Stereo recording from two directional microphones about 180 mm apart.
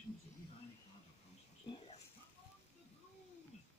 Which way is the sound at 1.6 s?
35° left (ahead or behind).